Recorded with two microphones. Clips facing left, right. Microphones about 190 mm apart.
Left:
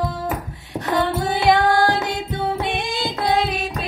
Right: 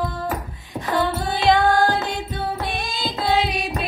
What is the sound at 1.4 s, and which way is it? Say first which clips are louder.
Music: even; 20° left (ahead or behind).